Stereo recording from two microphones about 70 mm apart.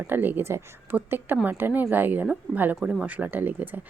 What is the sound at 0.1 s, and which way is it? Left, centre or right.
A woman's voice, right.